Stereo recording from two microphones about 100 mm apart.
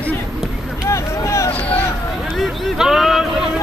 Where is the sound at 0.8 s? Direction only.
30° left (ahead or behind).